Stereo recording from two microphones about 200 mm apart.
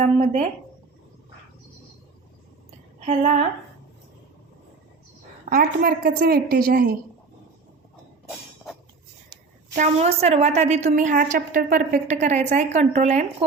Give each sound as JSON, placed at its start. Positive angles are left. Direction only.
{"t": 0.0, "sound": "a woman's voice", "side_deg": -30}
{"t": 5.5, "sound": "a woman's voice", "side_deg": -45}
{"t": 9.7, "sound": "a woman's voice", "side_deg": -35}